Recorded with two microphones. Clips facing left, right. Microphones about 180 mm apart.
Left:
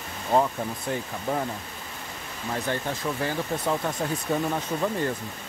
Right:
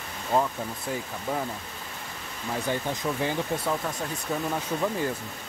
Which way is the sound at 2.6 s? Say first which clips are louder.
Right 1 dB; 15° right (ahead or behind).